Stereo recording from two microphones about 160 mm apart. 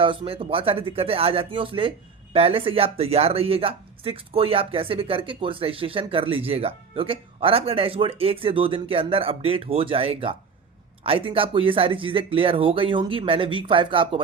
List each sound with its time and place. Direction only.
0.0 s speech: 35° right (ahead or behind)